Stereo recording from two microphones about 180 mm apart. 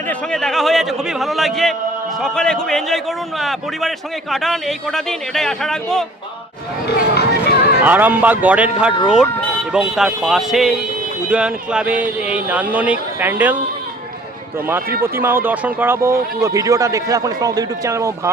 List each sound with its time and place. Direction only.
0.1 s a man's voice: 5° left (ahead or behind)
6.8 s a sound: 65° left (ahead or behind)
7.9 s a man's voice: 10° right (ahead or behind)
15.0 s speech: 10° right (ahead or behind)